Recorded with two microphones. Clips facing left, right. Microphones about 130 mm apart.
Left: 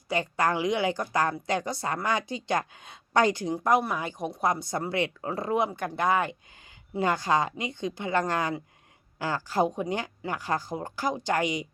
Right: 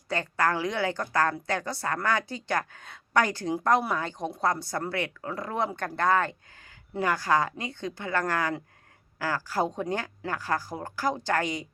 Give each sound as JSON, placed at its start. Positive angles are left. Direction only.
{"t": 0.1, "sound": "a woman's voice", "side_deg": 15}
{"t": 5.5, "sound": "a woman's voice", "side_deg": 10}